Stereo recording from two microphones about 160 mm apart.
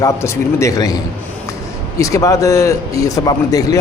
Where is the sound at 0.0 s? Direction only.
15° left (ahead or behind).